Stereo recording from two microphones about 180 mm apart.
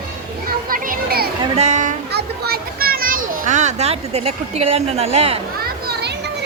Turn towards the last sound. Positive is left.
turn(degrees=-35)  # may be behind; listen again after turning